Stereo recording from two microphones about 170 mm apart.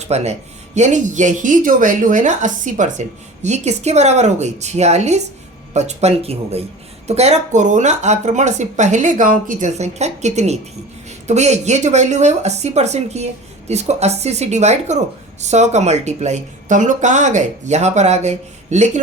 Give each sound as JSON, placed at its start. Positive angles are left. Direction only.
{"t": 0.0, "sound": "speech", "side_deg": -40}